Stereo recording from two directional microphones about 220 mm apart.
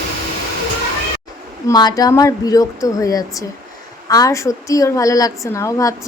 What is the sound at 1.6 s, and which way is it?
A woman's voice, 20° left (ahead or behind).